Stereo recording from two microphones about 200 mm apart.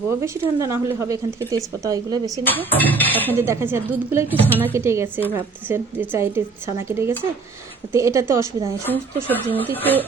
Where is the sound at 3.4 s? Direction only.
10° right (ahead or behind).